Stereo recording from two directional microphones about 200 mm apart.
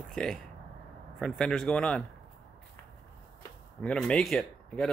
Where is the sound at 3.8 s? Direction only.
5° left (ahead or behind).